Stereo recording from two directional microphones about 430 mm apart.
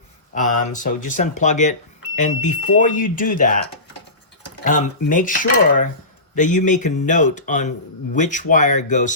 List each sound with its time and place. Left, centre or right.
0.7 s speech: centre
4.6 s speech: centre